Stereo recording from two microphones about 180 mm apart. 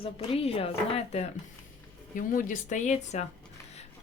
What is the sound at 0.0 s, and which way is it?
Speech, 35° left (ahead or behind).